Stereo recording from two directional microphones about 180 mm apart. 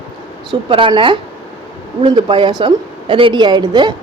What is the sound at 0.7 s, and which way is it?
A woman's voice, 30° right (ahead or behind).